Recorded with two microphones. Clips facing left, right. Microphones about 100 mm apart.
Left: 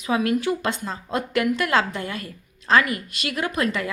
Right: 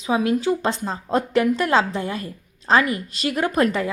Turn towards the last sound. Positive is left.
turn(degrees=-35)  # may be behind; listen again after turning